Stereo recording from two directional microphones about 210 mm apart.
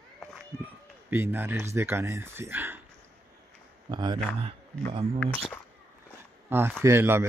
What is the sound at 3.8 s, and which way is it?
Speech, 20° right (ahead or behind).